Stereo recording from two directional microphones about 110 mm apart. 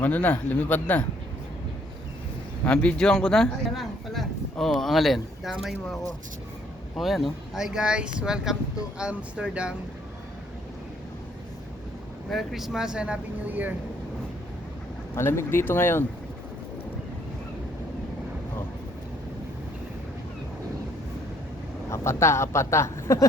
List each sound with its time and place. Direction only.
0.0 s speech: 15° left (ahead or behind)
2.6 s a man's voice: 10° left (ahead or behind); by 9.7 s 10° right (ahead or behind)
12.3 s speech: centre (ahead or behind)
15.1 s speech: 25° left (ahead or behind)
21.8 s speech: 25° left (ahead or behind)